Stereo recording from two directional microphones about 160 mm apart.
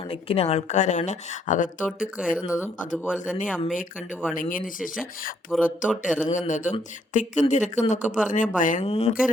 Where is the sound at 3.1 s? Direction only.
55° left (ahead or behind).